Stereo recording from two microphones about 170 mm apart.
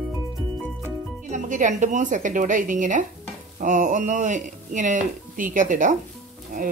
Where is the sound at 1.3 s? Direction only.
45° right (ahead or behind).